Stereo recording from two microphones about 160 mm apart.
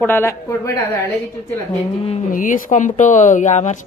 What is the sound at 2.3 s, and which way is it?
A woman's voice, 55° left (ahead or behind).